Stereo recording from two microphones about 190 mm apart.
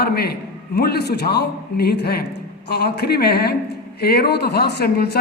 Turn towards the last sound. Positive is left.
turn(degrees=55)  # may be behind; listen again after turning